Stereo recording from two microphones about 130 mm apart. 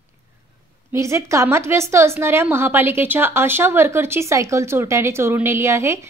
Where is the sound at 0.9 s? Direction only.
20° right (ahead or behind).